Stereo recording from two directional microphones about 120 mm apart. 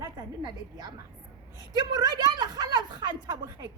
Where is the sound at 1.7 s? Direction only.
35° right (ahead or behind).